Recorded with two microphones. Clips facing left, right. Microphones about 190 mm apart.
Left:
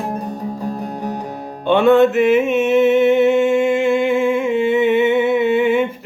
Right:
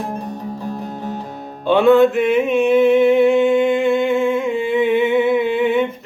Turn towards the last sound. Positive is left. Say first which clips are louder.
# left 1 dB
turn(degrees=0)  # may be behind; listen again after turning